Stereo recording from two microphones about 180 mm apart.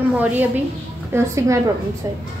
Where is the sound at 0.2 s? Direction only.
10° right (ahead or behind).